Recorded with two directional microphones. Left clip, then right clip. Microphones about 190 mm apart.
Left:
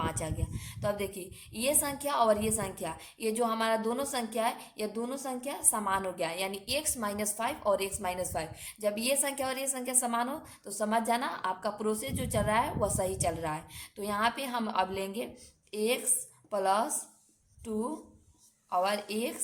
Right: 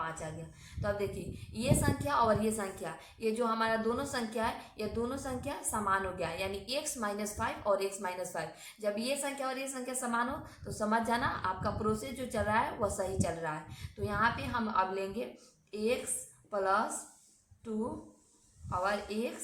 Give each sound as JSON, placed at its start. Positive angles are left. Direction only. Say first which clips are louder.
{"t": 0.0, "sound": "a woman's voice", "louder": "left 4 dB", "side_deg": 40}
{"t": 18.7, "sound": "a woman's voice", "louder": "left 4 dB", "side_deg": 35}